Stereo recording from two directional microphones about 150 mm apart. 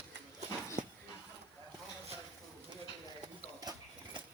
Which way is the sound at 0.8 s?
60° right (ahead or behind).